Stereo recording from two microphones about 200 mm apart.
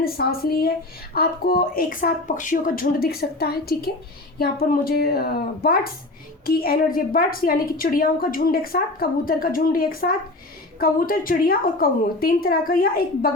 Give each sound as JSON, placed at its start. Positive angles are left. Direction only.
{"t": 0.0, "sound": "a woman's voice", "side_deg": 50}